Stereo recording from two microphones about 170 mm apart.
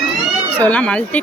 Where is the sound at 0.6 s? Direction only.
10° left (ahead or behind).